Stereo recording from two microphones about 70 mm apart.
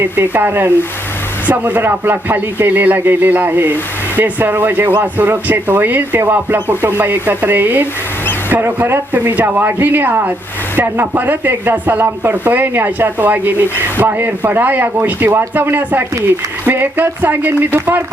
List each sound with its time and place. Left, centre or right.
0.0 s speech: right
9.1 s speech: right